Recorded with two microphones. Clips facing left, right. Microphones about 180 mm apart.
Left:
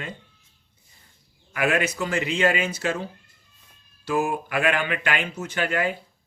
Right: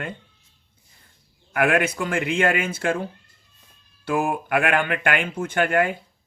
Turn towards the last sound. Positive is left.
turn(degrees=-55)  # may be behind; listen again after turning